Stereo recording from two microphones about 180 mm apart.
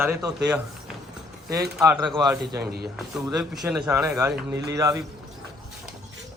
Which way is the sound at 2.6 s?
60° right (ahead or behind).